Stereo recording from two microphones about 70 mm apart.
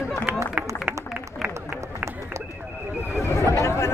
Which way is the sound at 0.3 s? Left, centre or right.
Right.